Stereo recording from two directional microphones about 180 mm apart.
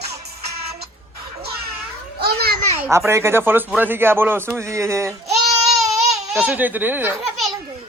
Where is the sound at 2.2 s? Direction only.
60° right (ahead or behind).